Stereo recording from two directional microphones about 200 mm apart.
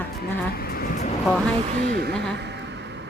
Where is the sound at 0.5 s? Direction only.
50° left (ahead or behind).